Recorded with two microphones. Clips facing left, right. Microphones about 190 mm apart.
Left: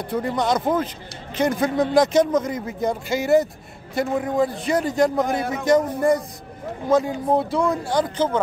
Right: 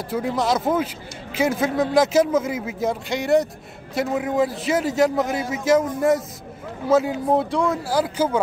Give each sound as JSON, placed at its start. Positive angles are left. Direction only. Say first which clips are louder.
{"t": 0.0, "sound": "speech", "louder": "even", "side_deg": -5}
{"t": 5.4, "sound": "a man's voice", "louder": "left 1 dB", "side_deg": 60}
{"t": 5.7, "sound": "speech", "louder": "even", "side_deg": 0}